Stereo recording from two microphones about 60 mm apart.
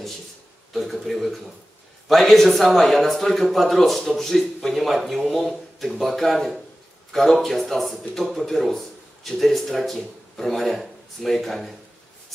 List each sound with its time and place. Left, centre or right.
0.7 s speech: centre